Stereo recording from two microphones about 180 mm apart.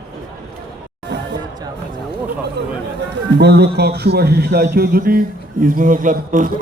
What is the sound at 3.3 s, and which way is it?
Speech, 65° right (ahead or behind).